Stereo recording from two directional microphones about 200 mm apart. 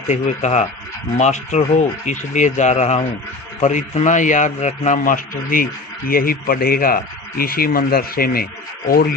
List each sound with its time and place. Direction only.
0.1 s a man's voice: 35° left (ahead or behind)